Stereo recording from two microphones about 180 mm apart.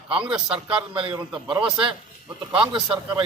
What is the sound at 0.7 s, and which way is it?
Speech, 5° right (ahead or behind).